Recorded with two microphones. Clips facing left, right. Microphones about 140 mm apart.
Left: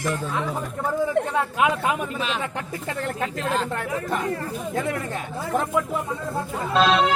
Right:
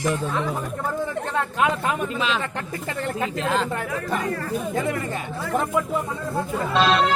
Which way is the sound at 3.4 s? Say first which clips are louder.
Right 2 dB; 90° right.